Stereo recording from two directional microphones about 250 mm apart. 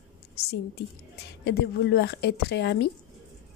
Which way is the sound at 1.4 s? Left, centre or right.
Left.